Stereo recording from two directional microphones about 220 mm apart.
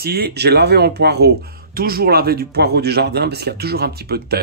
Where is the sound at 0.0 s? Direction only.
45° right (ahead or behind).